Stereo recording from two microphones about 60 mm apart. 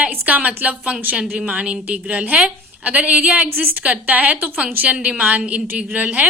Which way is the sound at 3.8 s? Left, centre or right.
Right.